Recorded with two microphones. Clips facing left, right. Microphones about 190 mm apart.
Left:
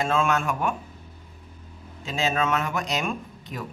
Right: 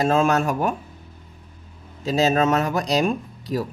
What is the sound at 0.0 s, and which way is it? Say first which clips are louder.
Speech: right 5 dB; 40° right (ahead or behind).